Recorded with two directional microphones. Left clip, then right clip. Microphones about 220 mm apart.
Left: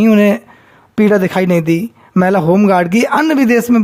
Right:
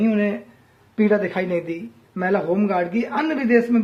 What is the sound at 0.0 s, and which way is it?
Speech, 50° left (ahead or behind).